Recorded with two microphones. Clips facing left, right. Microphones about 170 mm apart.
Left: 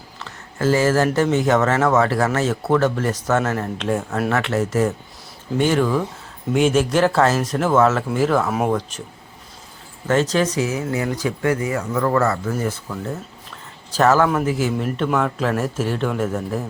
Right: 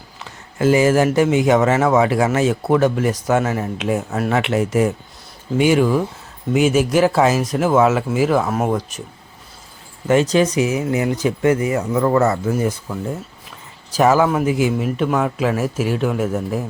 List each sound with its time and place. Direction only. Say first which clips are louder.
0.2 s speech: right 3 dB; 15° right (ahead or behind)
10.1 s speech: right 3 dB; 15° right (ahead or behind)